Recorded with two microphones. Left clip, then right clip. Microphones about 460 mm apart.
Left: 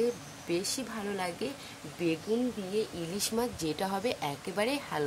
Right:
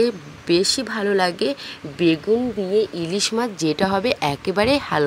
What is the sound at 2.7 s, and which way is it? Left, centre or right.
Speech, left.